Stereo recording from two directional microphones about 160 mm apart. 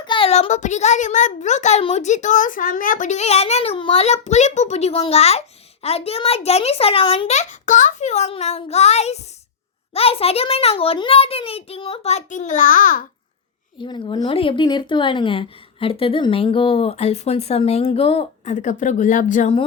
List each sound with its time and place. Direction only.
0.0 s a sound: 30° left (ahead or behind)
0.3 s speech: 45° left (ahead or behind)
13.7 s speech: 30° left (ahead or behind); by 19.5 s 50° left (ahead or behind)